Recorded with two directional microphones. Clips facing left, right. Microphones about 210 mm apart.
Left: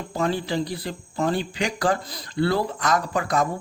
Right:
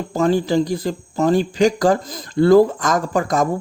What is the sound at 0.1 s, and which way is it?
Speech, 40° right (ahead or behind).